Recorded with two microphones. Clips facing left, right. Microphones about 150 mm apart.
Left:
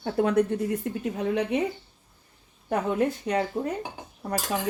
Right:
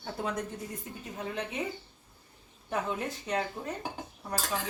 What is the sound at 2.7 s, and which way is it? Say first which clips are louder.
Speech: left 8 dB; 55° left (ahead or behind).